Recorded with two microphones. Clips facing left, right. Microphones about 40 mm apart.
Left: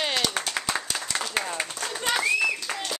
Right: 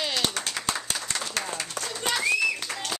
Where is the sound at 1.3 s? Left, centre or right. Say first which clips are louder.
Left 4 dB; centre.